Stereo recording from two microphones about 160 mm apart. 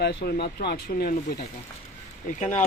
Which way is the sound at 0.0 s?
90° left.